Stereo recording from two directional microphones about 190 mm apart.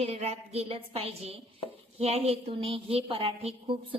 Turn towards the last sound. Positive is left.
turn(degrees=-30)  # may be behind; listen again after turning